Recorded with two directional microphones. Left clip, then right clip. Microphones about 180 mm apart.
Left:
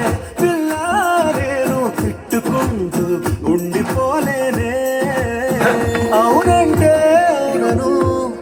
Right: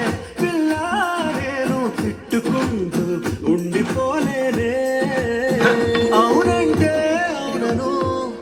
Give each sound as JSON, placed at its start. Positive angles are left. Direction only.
{"t": 0.9, "sound": "music", "side_deg": 20}
{"t": 5.5, "sound": "music", "side_deg": 20}